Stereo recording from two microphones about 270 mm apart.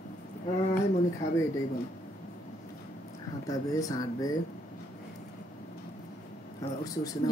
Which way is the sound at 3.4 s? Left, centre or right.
Centre.